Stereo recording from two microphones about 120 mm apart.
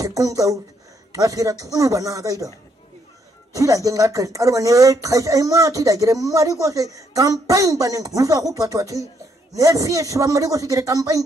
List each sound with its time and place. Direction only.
0.0 s speech: 30° right (ahead or behind)
3.5 s speech: 30° right (ahead or behind)